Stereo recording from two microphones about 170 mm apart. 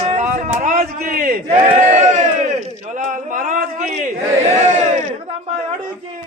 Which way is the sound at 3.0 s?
50° right (ahead or behind).